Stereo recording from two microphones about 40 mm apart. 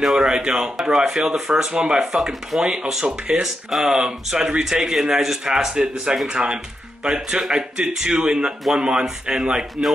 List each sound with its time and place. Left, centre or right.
0.0 s speech: centre